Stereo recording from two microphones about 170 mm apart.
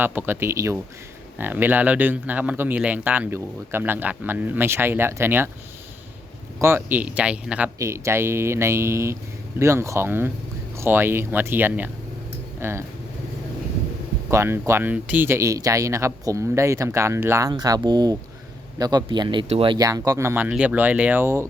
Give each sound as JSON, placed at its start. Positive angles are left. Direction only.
{"t": 0.0, "sound": "speech", "side_deg": -10}
{"t": 6.6, "sound": "speech", "side_deg": -15}
{"t": 14.3, "sound": "speech", "side_deg": -15}